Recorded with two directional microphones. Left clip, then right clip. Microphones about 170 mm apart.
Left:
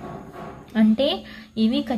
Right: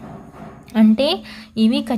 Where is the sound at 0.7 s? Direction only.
35° right (ahead or behind).